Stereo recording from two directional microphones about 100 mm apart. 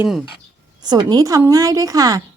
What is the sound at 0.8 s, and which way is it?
A woman's voice, 45° right (ahead or behind).